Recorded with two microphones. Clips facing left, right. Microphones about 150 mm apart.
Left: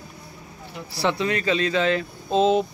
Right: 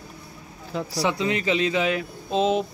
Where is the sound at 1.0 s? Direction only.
15° right (ahead or behind).